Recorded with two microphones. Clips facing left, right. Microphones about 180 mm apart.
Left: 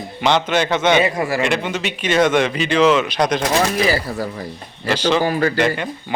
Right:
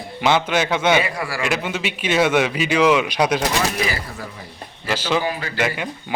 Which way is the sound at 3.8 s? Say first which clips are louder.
Left 8 dB; 35° left (ahead or behind).